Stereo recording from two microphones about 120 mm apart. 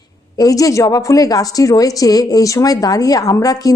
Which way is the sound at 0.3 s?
30° left (ahead or behind).